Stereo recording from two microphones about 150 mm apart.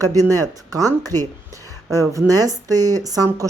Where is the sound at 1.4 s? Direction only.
20° right (ahead or behind).